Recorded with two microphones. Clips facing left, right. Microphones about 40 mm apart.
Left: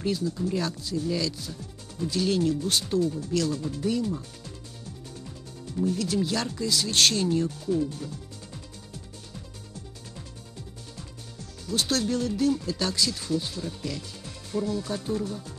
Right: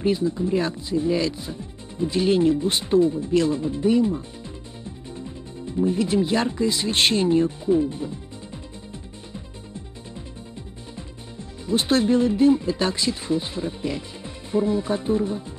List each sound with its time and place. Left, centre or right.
0.0 s speech: right
11.0 s speech: right